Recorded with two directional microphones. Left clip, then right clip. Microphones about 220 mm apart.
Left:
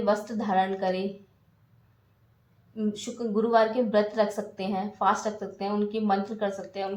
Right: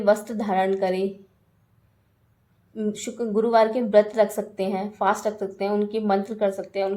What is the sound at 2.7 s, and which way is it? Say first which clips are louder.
A woman's voice: right 4 dB; 45° right (ahead or behind).